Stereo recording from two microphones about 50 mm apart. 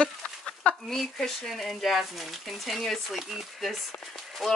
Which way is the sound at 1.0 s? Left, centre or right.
Centre.